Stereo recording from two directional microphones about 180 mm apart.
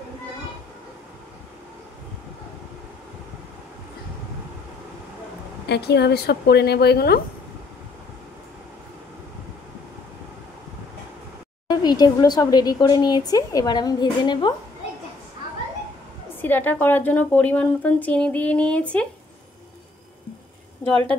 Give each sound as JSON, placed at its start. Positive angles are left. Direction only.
{"t": 5.7, "sound": "a woman's voice", "side_deg": 65}
{"t": 11.7, "sound": "speech", "side_deg": 20}
{"t": 16.3, "sound": "a woman's voice", "side_deg": 10}
{"t": 20.8, "sound": "a sound", "side_deg": 5}